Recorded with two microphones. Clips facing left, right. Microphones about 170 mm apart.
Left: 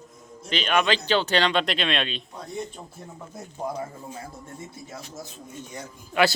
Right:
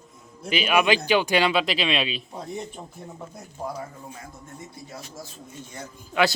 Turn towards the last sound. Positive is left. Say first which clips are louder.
# left 1 dB
turn(degrees=5)  # may be behind; listen again after turning